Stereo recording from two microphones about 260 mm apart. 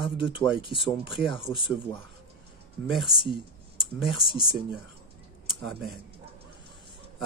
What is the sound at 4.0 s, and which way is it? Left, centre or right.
Speech, centre.